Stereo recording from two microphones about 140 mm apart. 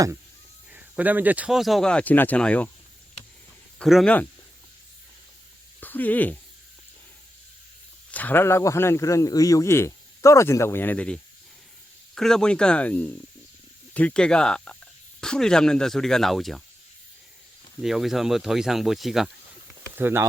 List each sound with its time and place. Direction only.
0.7 s speech: 10° right (ahead or behind); by 2.6 s 10° left (ahead or behind)
3.8 s speech: centre (ahead or behind)
5.8 s speech: 10° left (ahead or behind)
8.1 s a man's voice: 15° left (ahead or behind)
17.8 s speech: centre (ahead or behind)
20.0 s speech: 15° right (ahead or behind)